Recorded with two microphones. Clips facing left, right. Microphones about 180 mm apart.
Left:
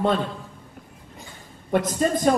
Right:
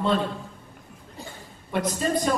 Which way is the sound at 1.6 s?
50° left (ahead or behind).